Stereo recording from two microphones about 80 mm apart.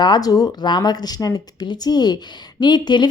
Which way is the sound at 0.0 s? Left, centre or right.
Left.